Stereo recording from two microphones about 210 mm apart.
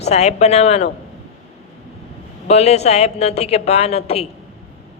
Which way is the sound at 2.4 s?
30° left (ahead or behind).